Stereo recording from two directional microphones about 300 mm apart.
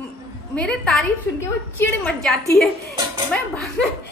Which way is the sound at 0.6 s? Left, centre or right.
Centre.